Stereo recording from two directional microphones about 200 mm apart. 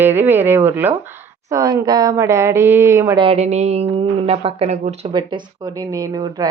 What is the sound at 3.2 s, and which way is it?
Speech, 30° right (ahead or behind).